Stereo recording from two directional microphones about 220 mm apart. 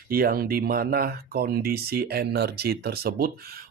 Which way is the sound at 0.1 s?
40° right (ahead or behind).